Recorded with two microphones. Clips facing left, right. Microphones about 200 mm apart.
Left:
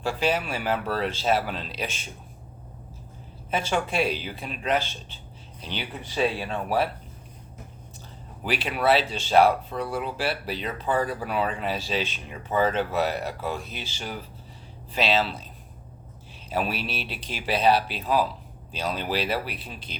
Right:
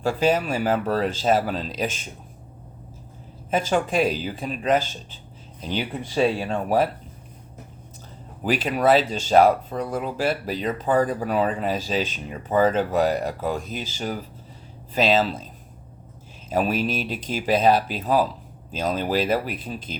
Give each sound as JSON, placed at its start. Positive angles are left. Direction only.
{"t": 0.0, "sound": "speech", "side_deg": -45}
{"t": 3.5, "sound": "speech", "side_deg": -40}
{"t": 8.4, "sound": "speech", "side_deg": -45}
{"t": 16.5, "sound": "speech", "side_deg": -45}